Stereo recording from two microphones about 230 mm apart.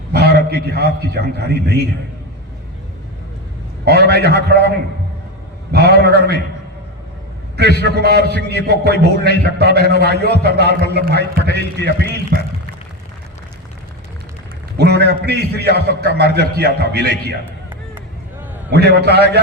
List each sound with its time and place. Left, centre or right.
0.1 s a man's voice: right
3.8 s a man's voice: right
5.7 s a man's voice: right
7.8 s a man's voice: right
14.8 s a man's voice: right
18.9 s a man's voice: right